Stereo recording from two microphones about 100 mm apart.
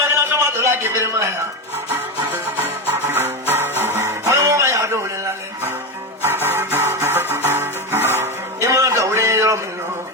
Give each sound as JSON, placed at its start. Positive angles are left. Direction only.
{"t": 0.0, "sound": "a sound", "side_deg": -25}
{"t": 3.1, "sound": "music", "side_deg": -20}
{"t": 6.2, "sound": "music", "side_deg": -20}